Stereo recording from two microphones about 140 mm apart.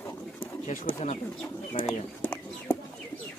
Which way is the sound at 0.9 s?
45° left (ahead or behind).